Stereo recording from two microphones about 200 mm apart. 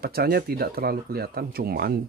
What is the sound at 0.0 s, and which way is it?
Speech, 50° right (ahead or behind).